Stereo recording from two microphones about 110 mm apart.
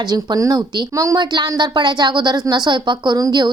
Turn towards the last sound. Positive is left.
turn(degrees=-40)  # may be behind; listen again after turning